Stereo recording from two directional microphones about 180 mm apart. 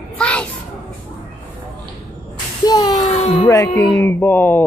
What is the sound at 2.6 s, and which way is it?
Speech, 25° left (ahead or behind).